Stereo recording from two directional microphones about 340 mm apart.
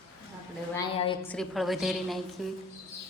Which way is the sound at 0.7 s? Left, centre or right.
Centre.